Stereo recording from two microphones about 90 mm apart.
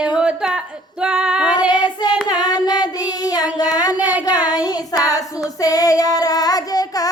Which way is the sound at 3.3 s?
45° left (ahead or behind).